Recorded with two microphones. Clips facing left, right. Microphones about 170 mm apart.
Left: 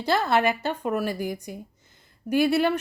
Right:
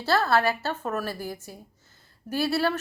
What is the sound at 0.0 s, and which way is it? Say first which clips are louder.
A woman's voice: left 1 dB; 15° left (ahead or behind).